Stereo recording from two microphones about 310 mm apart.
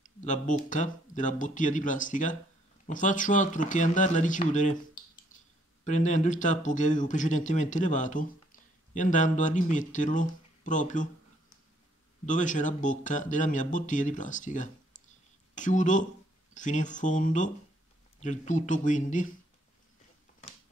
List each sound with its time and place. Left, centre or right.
0.0 s speech: left
12.3 s speech: left